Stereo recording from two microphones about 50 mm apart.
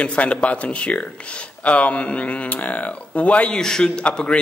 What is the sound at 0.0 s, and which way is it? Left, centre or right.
A man's voice, left.